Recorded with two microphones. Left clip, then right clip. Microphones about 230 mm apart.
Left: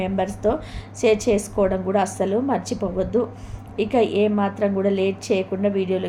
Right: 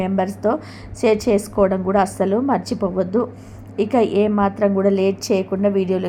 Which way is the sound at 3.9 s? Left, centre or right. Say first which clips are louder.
Right 2 dB; centre.